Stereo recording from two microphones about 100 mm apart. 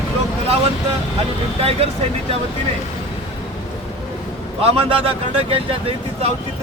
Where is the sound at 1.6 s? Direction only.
85° right.